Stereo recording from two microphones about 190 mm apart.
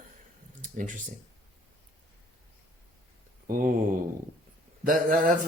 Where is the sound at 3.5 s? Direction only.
45° right (ahead or behind).